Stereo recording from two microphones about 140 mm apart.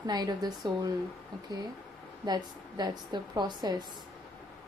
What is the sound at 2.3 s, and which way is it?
A woman's voice, 30° right (ahead or behind).